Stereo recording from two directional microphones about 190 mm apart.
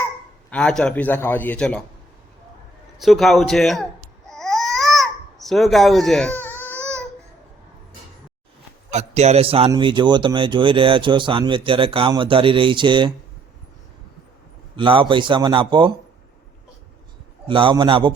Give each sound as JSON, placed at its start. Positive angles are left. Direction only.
{"t": 0.5, "sound": "a man's voice", "side_deg": 5}
{"t": 3.0, "sound": "speech", "side_deg": 0}
{"t": 4.3, "sound": "babbling", "side_deg": 0}
{"t": 6.7, "sound": "a sound", "side_deg": -15}
{"t": 8.9, "sound": "speech", "side_deg": -35}
{"t": 14.8, "sound": "speech", "side_deg": -25}
{"t": 17.5, "sound": "speech", "side_deg": -25}